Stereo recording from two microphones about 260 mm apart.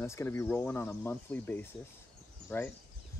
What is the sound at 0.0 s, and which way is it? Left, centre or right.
Speech, centre.